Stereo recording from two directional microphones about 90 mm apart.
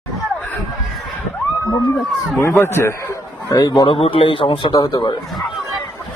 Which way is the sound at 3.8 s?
90° left.